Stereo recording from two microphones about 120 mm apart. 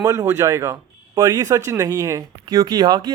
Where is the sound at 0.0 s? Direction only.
25° right (ahead or behind).